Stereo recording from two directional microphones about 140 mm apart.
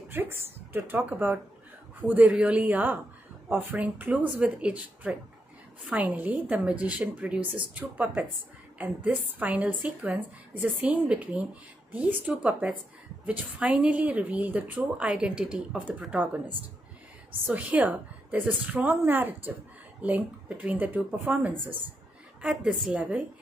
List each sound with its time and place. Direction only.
0.1 s a woman's voice: 15° right (ahead or behind)
17.5 s a woman's voice: 10° right (ahead or behind)